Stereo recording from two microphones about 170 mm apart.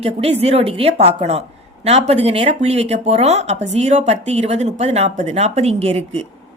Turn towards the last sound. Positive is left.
turn(degrees=-40)  # may be behind; listen again after turning